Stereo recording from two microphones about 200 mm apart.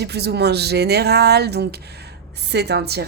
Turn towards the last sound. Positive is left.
turn(degrees=-55)  # may be behind; listen again after turning